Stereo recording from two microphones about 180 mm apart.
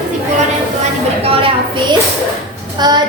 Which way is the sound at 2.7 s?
25° right (ahead or behind).